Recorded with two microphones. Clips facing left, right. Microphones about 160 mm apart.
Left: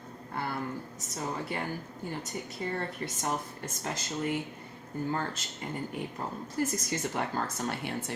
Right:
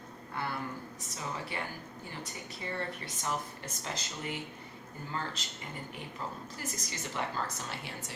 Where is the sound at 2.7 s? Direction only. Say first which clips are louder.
Left 3 dB; 45° left (ahead or behind).